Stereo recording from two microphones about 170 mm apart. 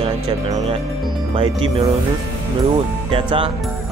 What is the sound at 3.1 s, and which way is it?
Speech, 30° right (ahead or behind).